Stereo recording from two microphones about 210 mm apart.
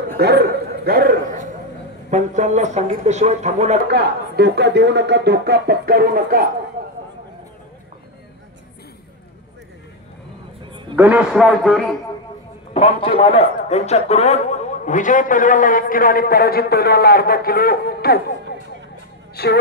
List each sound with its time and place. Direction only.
0.2 s a sound: 50° right (ahead or behind)
2.0 s speech: 35° right (ahead or behind)
3.8 s speech: 50° right (ahead or behind)
11.0 s a man's voice: 5° right (ahead or behind)
12.7 s a man's voice: 30° left (ahead or behind); by 18.2 s 45° left (ahead or behind)
19.3 s speech: 50° left (ahead or behind)